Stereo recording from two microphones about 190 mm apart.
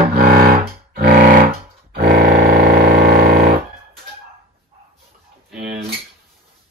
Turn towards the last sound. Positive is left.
turn(degrees=-55)  # may be behind; listen again after turning